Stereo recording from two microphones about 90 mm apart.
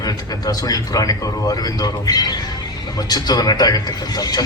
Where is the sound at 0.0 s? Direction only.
45° left (ahead or behind).